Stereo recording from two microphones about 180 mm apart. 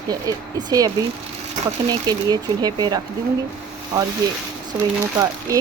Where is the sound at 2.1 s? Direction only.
20° right (ahead or behind).